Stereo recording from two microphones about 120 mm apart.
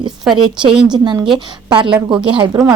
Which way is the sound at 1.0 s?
40° right (ahead or behind).